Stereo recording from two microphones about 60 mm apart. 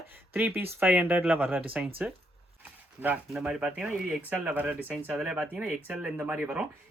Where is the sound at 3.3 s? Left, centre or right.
Centre.